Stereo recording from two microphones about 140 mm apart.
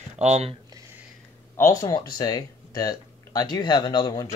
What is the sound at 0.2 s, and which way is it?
Speech, 50° right (ahead or behind).